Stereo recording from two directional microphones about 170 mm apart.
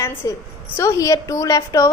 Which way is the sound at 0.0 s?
15° left (ahead or behind).